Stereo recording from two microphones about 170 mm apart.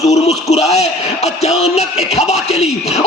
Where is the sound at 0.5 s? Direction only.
40° left (ahead or behind).